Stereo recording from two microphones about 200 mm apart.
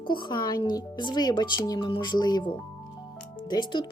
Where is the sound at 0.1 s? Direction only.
25° left (ahead or behind).